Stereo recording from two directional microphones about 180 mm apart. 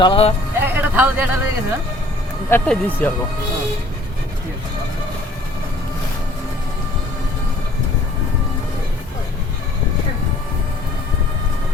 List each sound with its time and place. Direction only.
0.0 s speech: 30° left (ahead or behind)
0.6 s a sound: 10° right (ahead or behind)
2.5 s speech: 10° left (ahead or behind)